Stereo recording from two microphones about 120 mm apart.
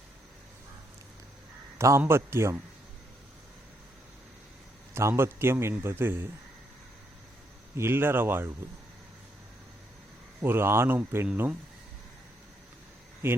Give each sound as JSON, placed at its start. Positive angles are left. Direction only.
{"t": 1.8, "sound": "a man's voice", "side_deg": -20}
{"t": 4.9, "sound": "a man's voice", "side_deg": -20}
{"t": 7.8, "sound": "speech", "side_deg": -20}
{"t": 10.4, "sound": "a man's voice", "side_deg": -20}
{"t": 13.2, "sound": "speech", "side_deg": -20}